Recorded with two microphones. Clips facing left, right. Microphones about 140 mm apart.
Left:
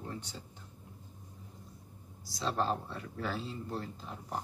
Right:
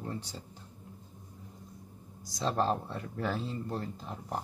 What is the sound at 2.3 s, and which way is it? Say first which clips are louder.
Speech: right 3 dB; 40° right (ahead or behind).